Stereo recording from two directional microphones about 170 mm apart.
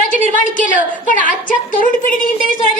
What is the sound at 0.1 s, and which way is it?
A woman's voice, 50° left (ahead or behind).